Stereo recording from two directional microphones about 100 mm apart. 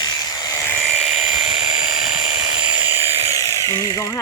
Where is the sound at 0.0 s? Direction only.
45° left (ahead or behind).